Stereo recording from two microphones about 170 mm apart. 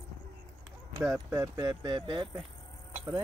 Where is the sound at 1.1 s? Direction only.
15° right (ahead or behind).